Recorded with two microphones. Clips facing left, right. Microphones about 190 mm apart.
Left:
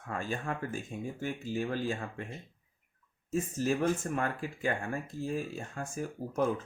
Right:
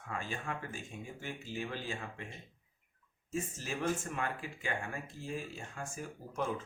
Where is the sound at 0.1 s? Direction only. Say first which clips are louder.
Left 5 dB; 45° left (ahead or behind).